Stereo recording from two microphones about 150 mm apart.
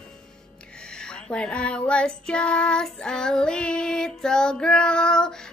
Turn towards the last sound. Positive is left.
turn(degrees=5)  # may be behind; listen again after turning